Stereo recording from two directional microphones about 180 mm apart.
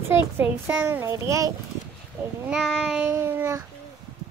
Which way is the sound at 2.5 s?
Centre (ahead or behind).